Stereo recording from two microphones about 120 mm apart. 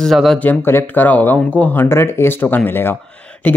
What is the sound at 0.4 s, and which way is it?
Speech, 15° left (ahead or behind).